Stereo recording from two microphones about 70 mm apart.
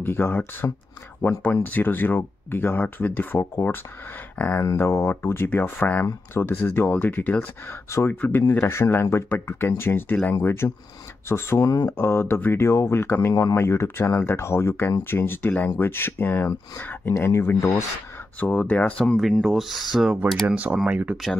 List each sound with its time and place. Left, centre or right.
0.0 s speech: left
4.7 s speech: left
8.1 s speech: left
13.3 s speech: left
13.6 s speech: left
13.8 s speech: left
18.4 s speech: left
19.4 s speech: centre
20.4 s speech: right